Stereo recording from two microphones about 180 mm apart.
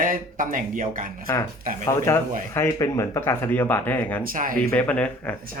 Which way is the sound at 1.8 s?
15° left (ahead or behind).